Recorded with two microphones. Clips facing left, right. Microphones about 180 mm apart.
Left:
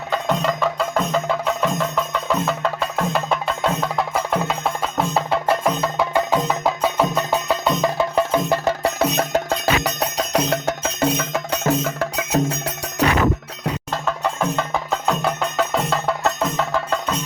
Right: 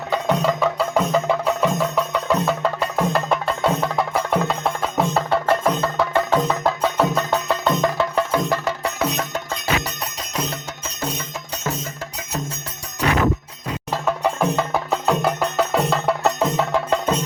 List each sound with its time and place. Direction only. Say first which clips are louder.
0.1 s music: right 1 dB; 10° right (ahead or behind); by 8.4 s 15° left (ahead or behind)
8.4 s music: left 3 dB; 30° left (ahead or behind)
9.5 s music: left 4 dB; 65° left (ahead or behind)
13.9 s music: right 5 dB; 10° right (ahead or behind)
16.4 s music: right 2 dB; 15° right (ahead or behind)